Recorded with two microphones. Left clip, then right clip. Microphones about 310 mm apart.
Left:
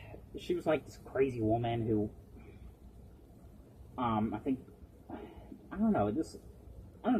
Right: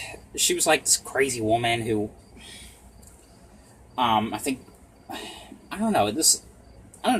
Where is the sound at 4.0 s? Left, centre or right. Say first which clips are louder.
Right 12 dB; right.